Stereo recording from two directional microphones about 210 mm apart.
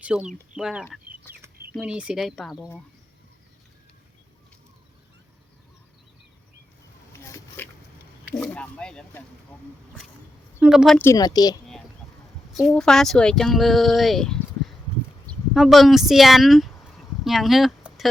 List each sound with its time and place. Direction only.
0.0 s speech: 5° right (ahead or behind)
7.1 s a sound: 15° left (ahead or behind)
8.3 s speech: 10° left (ahead or behind)
10.6 s speech: 5° right (ahead or behind)
11.0 s speech: 15° left (ahead or behind)
12.5 s speech: centre (ahead or behind)
15.3 s a sound: centre (ahead or behind)